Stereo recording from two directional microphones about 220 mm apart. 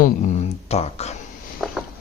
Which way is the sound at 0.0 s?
30° left (ahead or behind).